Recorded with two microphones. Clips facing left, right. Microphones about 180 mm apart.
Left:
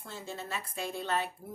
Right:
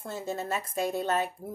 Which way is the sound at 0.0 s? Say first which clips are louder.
Right 7 dB; 45° right (ahead or behind).